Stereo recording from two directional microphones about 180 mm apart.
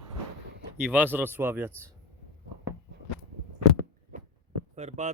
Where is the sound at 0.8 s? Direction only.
10° right (ahead or behind).